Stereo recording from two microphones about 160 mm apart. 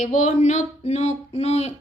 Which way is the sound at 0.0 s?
50° left (ahead or behind).